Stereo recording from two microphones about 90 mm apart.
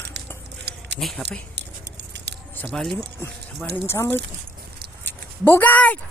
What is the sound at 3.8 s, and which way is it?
Speech, 30° left (ahead or behind).